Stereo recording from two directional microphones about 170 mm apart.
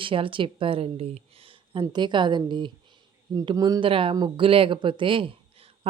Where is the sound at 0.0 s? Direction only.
30° right (ahead or behind).